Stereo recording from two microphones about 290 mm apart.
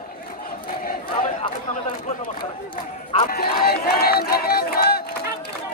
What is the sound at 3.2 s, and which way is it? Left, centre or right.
Speech, left.